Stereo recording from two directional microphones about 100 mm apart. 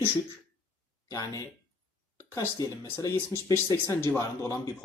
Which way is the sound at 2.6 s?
35° left (ahead or behind).